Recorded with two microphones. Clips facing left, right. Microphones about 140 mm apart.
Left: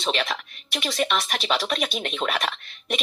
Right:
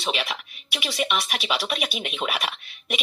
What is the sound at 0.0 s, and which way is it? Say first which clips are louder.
Speech: left 2 dB; 10° right (ahead or behind).